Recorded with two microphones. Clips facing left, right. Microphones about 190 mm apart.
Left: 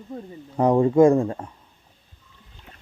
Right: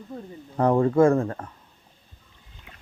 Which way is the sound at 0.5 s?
15° left (ahead or behind).